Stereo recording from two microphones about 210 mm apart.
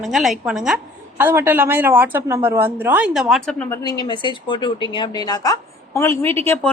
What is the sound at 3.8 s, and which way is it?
A woman's voice, 20° left (ahead or behind).